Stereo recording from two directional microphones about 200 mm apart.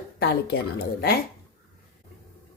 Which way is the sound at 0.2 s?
50° left (ahead or behind).